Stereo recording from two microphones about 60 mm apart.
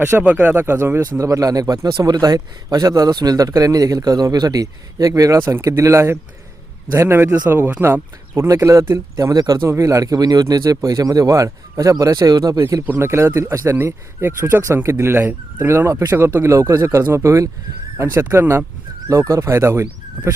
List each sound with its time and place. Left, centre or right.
0.0 s speech: right
1.2 s a man's voice: right
8.4 s speech: right
9.1 s a man's voice: right
9.6 s a man's voice: right
13.0 s speech: right
13.7 s speech: right
17.0 s speech: right
17.2 s speech: right
18.2 s speech: right
19.0 s speech: right